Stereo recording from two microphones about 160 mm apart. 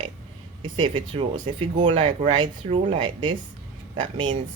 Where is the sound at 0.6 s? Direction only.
30° right (ahead or behind).